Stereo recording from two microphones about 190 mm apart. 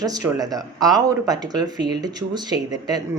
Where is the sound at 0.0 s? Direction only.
20° right (ahead or behind).